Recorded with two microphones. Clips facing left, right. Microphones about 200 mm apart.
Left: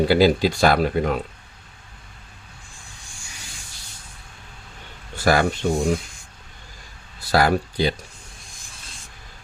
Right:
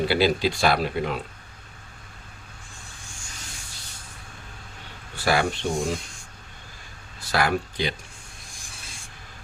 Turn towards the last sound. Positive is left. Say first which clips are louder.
# left 5 dB
turn(degrees=35)  # may be behind; listen again after turning